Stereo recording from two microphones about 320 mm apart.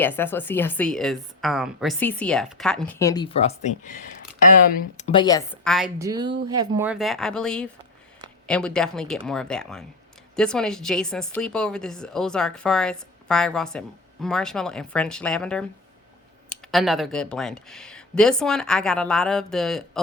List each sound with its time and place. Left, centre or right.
0.0 s speech: centre
5.6 s speech: centre